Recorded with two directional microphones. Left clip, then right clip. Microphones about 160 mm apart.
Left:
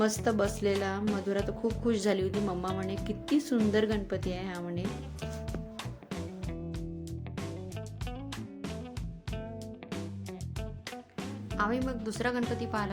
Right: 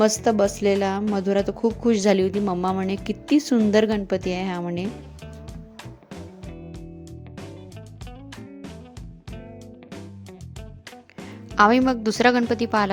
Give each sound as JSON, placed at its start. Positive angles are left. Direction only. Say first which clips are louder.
{"t": 0.0, "sound": "a woman's voice", "louder": "right 10 dB", "side_deg": -50}
{"t": 4.9, "sound": "music", "louder": "right 3 dB", "side_deg": 0}
{"t": 11.5, "sound": "speech", "louder": "right 15 dB", "side_deg": -60}